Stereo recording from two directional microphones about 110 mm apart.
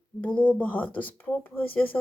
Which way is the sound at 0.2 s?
10° left (ahead or behind).